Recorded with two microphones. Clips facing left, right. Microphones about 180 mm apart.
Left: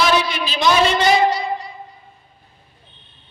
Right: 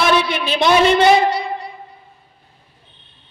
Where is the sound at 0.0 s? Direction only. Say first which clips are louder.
Right 1 dB; 60° right (ahead or behind).